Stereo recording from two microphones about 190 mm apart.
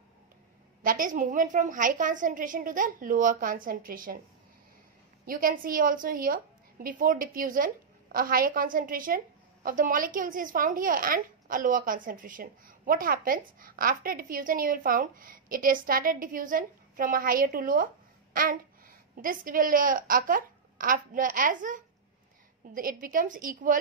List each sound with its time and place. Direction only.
0.8 s a woman's voice: 45° right (ahead or behind)
5.2 s a woman's voice: 50° right (ahead or behind)